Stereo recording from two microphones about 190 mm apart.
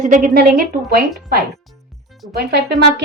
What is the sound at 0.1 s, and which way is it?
Speech, 45° right (ahead or behind).